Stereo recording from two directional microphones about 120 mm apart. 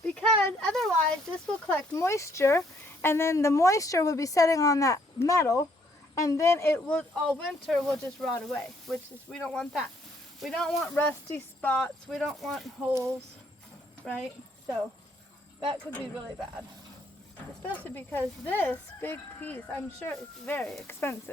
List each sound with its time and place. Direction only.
0.0 s a sound: 5° left (ahead or behind)
0.6 s speech: 5° left (ahead or behind)
1.9 s speech: 25° left (ahead or behind)
6.7 s speech: 10° left (ahead or behind)
10.9 s speech: 20° left (ahead or behind)
11.7 s speech: 5° left (ahead or behind)
12.9 s speech: 25° right (ahead or behind)
14.0 s speech: centre (ahead or behind)
17.6 s speech: 15° left (ahead or behind)